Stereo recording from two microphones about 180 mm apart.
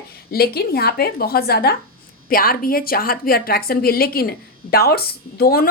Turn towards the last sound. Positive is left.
turn(degrees=55)  # may be behind; listen again after turning